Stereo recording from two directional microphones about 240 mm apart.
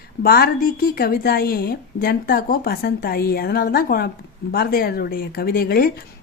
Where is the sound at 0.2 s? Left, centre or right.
Left.